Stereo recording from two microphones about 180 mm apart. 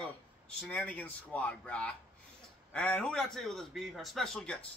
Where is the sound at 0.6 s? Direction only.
5° left (ahead or behind).